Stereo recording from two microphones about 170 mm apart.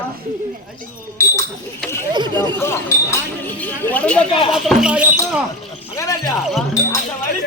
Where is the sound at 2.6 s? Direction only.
15° left (ahead or behind).